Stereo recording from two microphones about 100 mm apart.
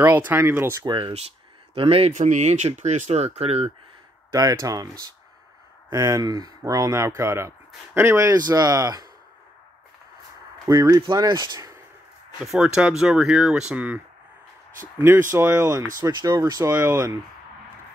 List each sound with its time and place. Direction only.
0.0 s speech: 20° right (ahead or behind)
0.8 s speech: 55° right (ahead or behind)
1.8 s speech: 75° right (ahead or behind)
3.1 s speech: 90° right
4.3 s speech: 35° right (ahead or behind)
5.9 s speech: 35° right (ahead or behind)
8.4 s speech: 40° right (ahead or behind)
10.7 s speech: 35° right (ahead or behind)
12.4 s speech: 5° right (ahead or behind); by 16.1 s 35° right (ahead or behind)
16.1 s speech: 50° right (ahead or behind)
16.3 s speech: 35° right (ahead or behind)
16.7 s speech: 20° right (ahead or behind)